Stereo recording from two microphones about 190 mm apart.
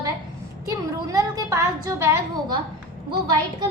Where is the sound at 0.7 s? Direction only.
20° right (ahead or behind).